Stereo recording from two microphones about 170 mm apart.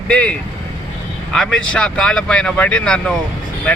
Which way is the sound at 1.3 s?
5° left (ahead or behind).